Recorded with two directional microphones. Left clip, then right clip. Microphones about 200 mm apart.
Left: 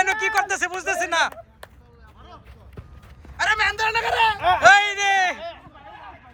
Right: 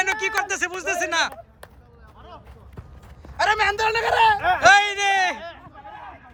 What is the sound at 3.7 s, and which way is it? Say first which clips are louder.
Speech: right 1 dB; 50° right (ahead or behind).